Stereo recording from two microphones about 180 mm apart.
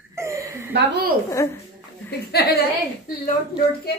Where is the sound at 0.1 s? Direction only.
15° right (ahead or behind).